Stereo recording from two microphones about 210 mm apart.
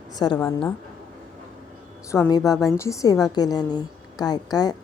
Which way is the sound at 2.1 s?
15° left (ahead or behind).